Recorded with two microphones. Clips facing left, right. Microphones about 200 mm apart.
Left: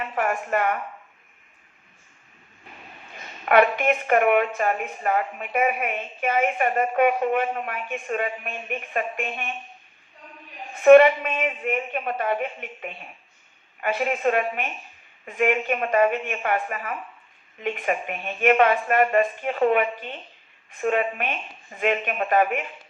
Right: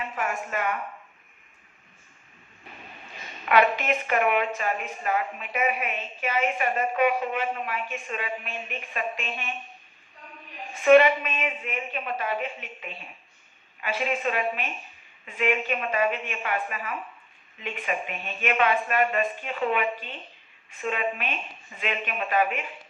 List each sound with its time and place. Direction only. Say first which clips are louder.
0.0 s a woman's voice: left 5 dB; 50° left (ahead or behind)
3.4 s a woman's voice: left 4 dB; 55° left (ahead or behind)
10.8 s a woman's voice: left 5 dB; 50° left (ahead or behind)